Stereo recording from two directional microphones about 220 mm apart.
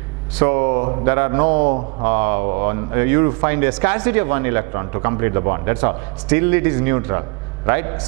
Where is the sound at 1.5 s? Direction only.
45° right (ahead or behind).